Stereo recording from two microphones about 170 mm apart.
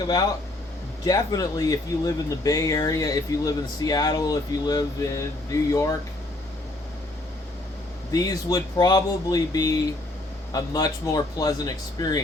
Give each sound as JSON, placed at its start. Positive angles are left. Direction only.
{"t": 1.0, "sound": "speech", "side_deg": 20}
{"t": 8.1, "sound": "speech", "side_deg": 20}